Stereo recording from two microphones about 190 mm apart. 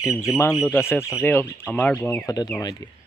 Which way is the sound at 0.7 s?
10° left (ahead or behind).